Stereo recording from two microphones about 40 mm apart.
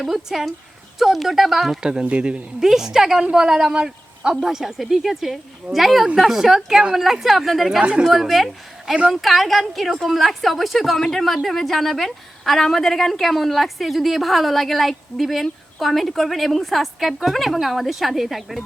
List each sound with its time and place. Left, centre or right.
0.0 s a woman's voice: centre
1.8 s speech: right
2.6 s a woman's voice: centre
3.8 s a sound: centre
4.4 s a woman's voice: centre
7.8 s speech: right
8.9 s a woman's voice: centre